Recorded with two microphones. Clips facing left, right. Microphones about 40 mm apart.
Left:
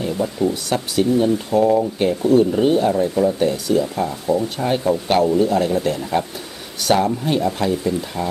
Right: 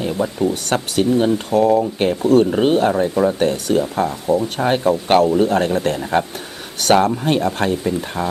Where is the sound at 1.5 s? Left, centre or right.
Right.